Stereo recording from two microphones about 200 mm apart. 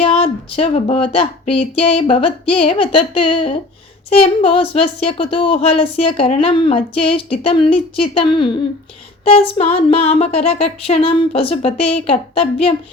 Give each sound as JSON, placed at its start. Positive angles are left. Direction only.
{"t": 0.0, "sound": "speech", "side_deg": 25}